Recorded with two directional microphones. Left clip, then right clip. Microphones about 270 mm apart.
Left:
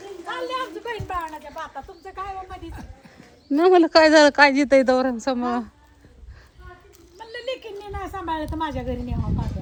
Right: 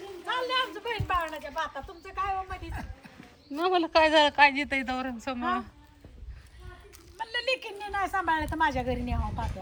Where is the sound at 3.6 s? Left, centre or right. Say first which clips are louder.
Left 10 dB; left.